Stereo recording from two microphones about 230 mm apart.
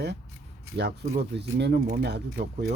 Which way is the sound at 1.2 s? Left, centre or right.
Right.